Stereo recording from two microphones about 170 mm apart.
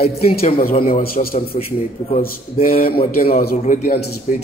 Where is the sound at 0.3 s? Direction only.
35° left (ahead or behind).